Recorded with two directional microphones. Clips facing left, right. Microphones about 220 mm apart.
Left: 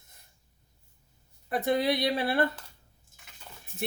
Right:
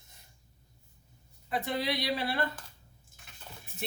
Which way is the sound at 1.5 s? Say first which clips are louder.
Left 6 dB; 50° left (ahead or behind).